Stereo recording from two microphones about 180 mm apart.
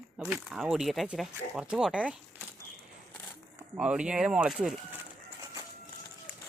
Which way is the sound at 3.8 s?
5° right (ahead or behind).